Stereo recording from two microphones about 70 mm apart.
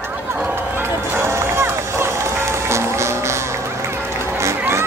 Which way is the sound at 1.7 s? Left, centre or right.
Right.